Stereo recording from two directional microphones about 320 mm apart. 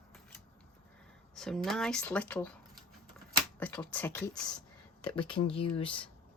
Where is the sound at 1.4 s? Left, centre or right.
Centre.